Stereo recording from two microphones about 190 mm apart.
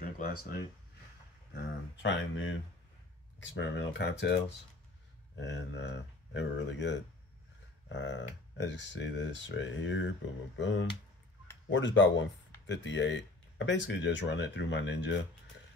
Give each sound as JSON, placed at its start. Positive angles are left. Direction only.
{"t": 0.4, "sound": "speech", "side_deg": 50}
{"t": 1.5, "sound": "speech", "side_deg": 70}
{"t": 3.5, "sound": "speech", "side_deg": 65}
{"t": 5.4, "sound": "speech", "side_deg": 70}